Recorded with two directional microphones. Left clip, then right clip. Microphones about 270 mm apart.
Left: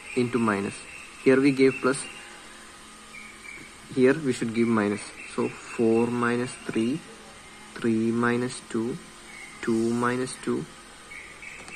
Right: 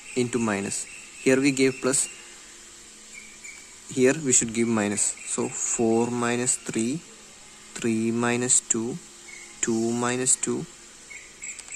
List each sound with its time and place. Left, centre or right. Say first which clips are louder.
0.1 s speech: left 1 dB; right
3.9 s speech: right 1 dB; right